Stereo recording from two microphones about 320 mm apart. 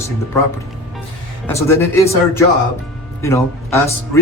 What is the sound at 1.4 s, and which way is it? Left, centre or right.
Speech, centre.